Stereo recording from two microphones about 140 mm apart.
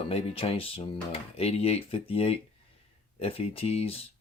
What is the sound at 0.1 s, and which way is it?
Speech, 45° left (ahead or behind).